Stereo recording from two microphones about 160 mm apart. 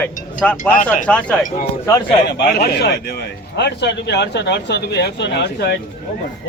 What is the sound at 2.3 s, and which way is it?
Speech, 80° left.